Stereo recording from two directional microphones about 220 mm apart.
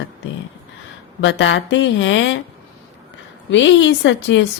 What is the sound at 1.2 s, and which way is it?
A woman's voice, 55° left (ahead or behind).